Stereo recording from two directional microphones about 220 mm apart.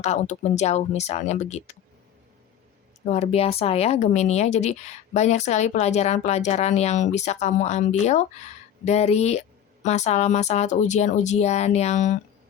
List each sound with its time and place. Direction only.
0.0 s a woman's voice: 30° left (ahead or behind)
3.1 s a woman's voice: 30° left (ahead or behind)